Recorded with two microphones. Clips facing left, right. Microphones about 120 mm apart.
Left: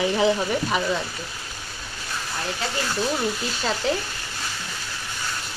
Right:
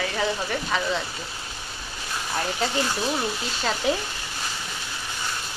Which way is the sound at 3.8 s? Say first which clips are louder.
Even; 10° right (ahead or behind).